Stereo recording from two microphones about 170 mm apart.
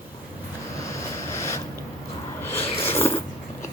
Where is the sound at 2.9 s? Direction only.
15° left (ahead or behind).